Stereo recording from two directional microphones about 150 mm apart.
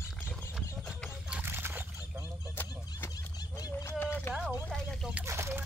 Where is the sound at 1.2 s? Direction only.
10° right (ahead or behind).